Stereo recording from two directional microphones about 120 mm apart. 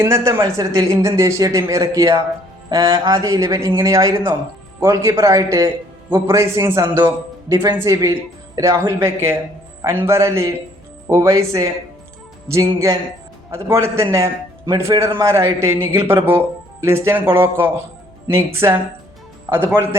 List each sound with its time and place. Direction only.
0.0 s speech: 20° right (ahead or behind)